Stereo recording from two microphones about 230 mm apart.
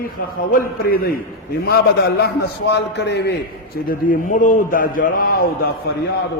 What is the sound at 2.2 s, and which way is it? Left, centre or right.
A man's voice, left.